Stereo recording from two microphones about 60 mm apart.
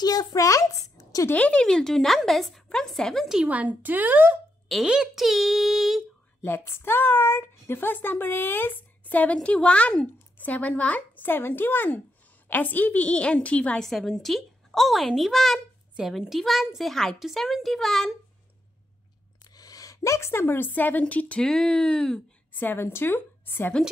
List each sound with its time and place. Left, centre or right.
0.0 s a woman's voice: left
1.3 s a woman's voice: left; by 3.3 s centre
3.4 s a woman's voice: right
4.8 s speech: centre
5.1 s a child's voice: centre
6.4 s speech: left
11.2 s a woman's voice: left; by 13.8 s centre
13.8 s a child's voice: centre
19.5 s a woman's voice: left
21.4 s a woman's voice: centre
22.5 s a woman's voice: left